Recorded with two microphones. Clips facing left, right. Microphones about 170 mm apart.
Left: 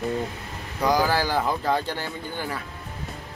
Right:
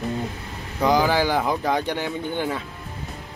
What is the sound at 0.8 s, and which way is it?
Speech, 20° right (ahead or behind).